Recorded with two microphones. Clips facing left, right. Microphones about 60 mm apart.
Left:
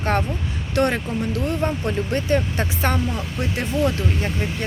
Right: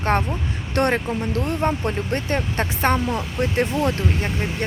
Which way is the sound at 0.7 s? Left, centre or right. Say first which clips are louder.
Even; right.